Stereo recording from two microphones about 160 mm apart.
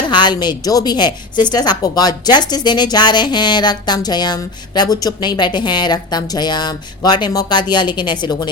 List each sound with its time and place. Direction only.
0.1 s a woman's voice: 25° left (ahead or behind)